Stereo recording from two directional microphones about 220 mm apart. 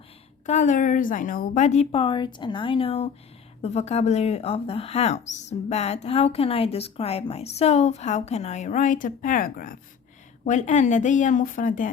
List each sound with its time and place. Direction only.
0.4 s a woman's voice: 35° left (ahead or behind)